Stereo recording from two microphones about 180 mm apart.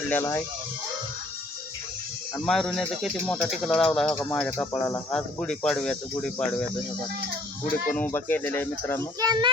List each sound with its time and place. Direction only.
0.1 s speech: 15° left (ahead or behind)
2.4 s speech: centre (ahead or behind)
7.9 s speech: 10° left (ahead or behind)
9.2 s a child's voice: 25° right (ahead or behind)